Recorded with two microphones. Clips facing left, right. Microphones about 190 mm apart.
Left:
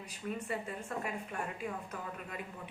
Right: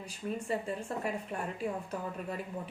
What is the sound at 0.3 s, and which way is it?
Speech, 30° right (ahead or behind).